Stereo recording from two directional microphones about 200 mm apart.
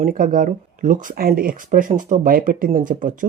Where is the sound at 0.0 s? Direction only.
45° right (ahead or behind).